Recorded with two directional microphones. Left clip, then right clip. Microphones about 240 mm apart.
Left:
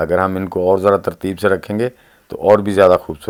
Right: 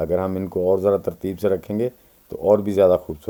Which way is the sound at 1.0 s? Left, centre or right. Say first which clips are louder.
Left 5 dB; centre.